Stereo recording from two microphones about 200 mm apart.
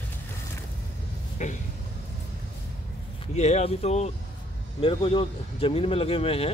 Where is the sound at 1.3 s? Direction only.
40° left (ahead or behind).